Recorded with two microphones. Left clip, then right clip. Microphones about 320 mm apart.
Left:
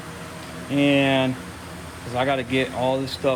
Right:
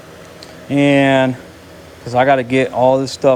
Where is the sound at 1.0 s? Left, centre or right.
Right.